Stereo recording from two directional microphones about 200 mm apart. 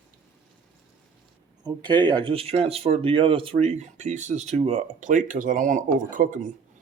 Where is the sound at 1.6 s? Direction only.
20° right (ahead or behind).